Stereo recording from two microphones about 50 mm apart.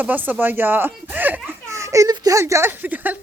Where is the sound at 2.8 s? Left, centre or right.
Right.